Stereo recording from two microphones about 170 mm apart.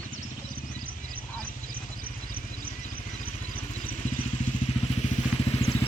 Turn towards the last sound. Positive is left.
turn(degrees=35)  # may be behind; listen again after turning